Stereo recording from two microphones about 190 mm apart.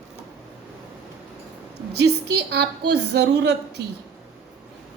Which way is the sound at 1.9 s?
60° right (ahead or behind).